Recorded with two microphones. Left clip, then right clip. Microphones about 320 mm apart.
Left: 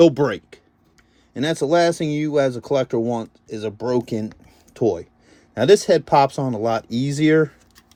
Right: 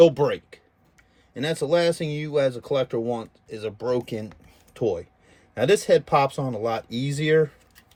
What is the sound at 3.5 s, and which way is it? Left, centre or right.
Speech, centre.